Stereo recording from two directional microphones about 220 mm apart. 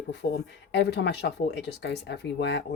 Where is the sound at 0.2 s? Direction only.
50° left (ahead or behind).